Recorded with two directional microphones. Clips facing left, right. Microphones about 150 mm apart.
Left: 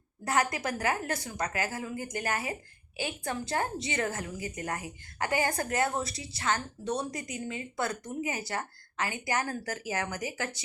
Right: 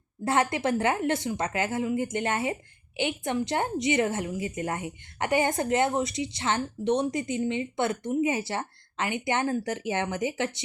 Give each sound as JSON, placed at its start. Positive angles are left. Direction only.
{"t": 0.3, "sound": "a woman's voice", "side_deg": -25}